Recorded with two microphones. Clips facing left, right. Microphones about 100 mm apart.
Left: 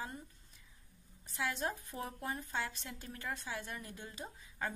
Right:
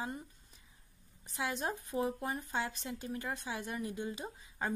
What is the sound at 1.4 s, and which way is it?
Speech, 20° right (ahead or behind).